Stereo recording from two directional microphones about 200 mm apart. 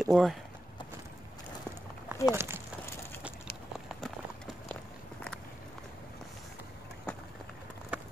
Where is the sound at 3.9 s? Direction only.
Centre (ahead or behind).